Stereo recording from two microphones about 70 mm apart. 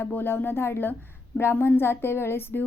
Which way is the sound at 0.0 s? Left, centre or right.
Left.